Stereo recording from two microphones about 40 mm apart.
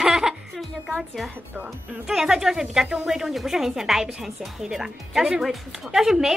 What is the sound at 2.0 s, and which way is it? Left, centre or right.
A woman's voice, centre.